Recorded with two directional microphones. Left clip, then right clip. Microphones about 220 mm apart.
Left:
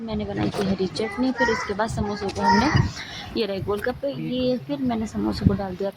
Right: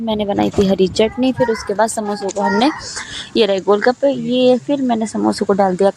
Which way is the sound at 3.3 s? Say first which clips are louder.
Right 12 dB; 35° right (ahead or behind).